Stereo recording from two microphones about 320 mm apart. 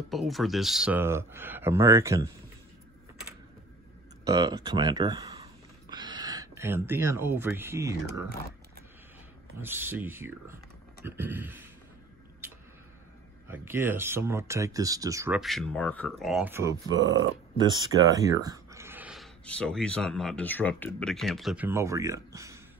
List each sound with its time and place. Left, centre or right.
0.1 s speech: centre
4.3 s speech: centre
9.6 s speech: centre
13.5 s speech: centre
17.0 s speech: right
17.6 s speech: centre